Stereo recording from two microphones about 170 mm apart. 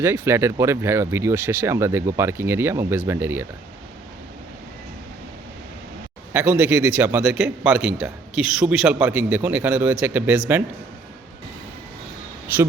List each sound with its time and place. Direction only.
0.0 s a man's voice: 15° right (ahead or behind)
6.3 s a man's voice: 10° right (ahead or behind)